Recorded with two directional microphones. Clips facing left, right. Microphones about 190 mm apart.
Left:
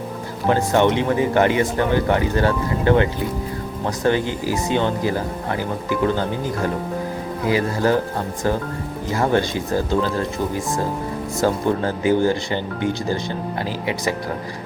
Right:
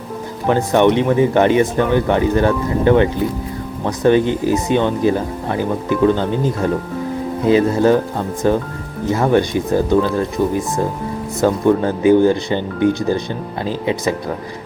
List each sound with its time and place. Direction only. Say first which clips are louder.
0.5 s speech: right 4 dB; 20° right (ahead or behind)